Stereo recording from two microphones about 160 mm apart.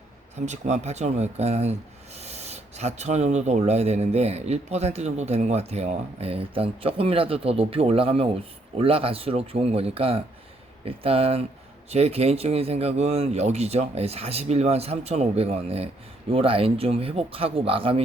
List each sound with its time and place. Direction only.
0.3 s speech: 45° right (ahead or behind)